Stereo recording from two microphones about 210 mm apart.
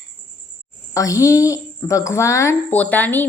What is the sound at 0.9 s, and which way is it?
A woman's voice, 15° left (ahead or behind).